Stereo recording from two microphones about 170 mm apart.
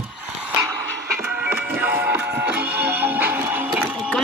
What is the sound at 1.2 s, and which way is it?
Music, 5° right (ahead or behind).